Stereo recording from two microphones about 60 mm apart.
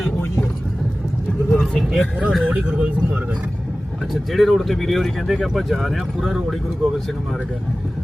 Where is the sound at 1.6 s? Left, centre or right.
Centre.